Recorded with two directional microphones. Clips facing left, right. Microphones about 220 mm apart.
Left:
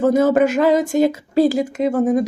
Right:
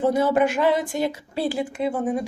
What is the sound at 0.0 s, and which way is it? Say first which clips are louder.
Speech: left 5 dB; 45° left (ahead or behind).